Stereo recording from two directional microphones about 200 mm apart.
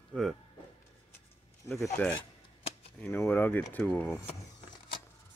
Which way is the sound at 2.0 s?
5° left (ahead or behind).